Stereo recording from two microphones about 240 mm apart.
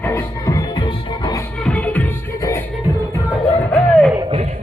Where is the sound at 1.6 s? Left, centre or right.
Centre.